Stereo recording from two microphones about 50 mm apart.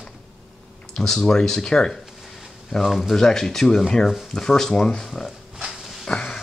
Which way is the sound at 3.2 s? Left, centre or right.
Centre.